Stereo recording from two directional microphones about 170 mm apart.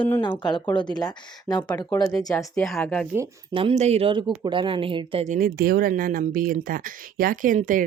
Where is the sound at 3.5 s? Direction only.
30° right (ahead or behind).